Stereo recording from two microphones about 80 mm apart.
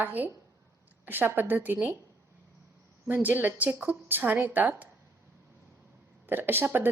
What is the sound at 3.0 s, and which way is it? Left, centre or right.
Speech, right.